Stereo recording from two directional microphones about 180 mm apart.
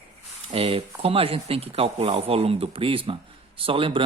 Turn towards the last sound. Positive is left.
turn(degrees=-30)  # may be behind; listen again after turning